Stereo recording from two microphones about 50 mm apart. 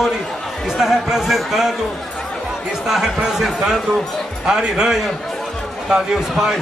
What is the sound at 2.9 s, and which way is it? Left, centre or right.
Speech, centre.